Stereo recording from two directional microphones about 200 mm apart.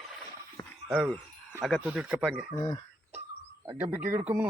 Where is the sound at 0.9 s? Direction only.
Centre (ahead or behind).